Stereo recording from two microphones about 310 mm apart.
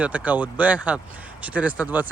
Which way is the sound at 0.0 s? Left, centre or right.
Centre.